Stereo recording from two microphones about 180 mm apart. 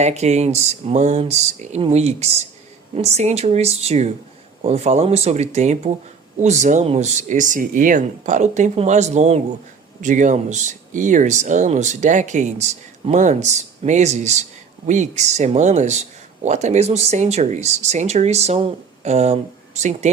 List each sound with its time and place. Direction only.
0.0 s speech: 40° right (ahead or behind)